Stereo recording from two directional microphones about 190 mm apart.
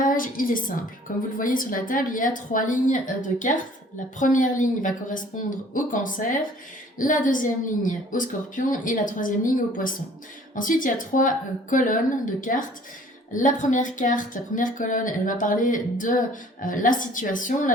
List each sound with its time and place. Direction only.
0.0 s a woman's voice: 45° left (ahead or behind)